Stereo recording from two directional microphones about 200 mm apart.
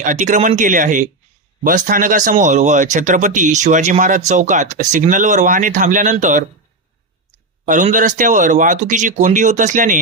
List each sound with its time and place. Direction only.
0.0 s speech: 40° right (ahead or behind)
7.6 s speech: 40° right (ahead or behind)